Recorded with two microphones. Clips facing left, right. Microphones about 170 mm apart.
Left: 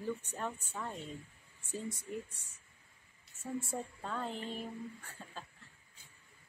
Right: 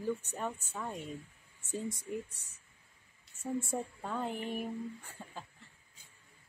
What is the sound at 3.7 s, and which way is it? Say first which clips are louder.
Speech: right 3 dB; 15° right (ahead or behind).